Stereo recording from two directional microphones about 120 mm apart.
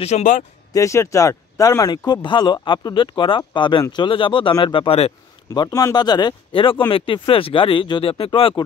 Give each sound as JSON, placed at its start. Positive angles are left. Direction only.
{"t": 0.0, "sound": "speech", "side_deg": 80}
{"t": 0.7, "sound": "speech", "side_deg": 25}
{"t": 4.8, "sound": "speech", "side_deg": 55}
{"t": 5.5, "sound": "speech", "side_deg": 30}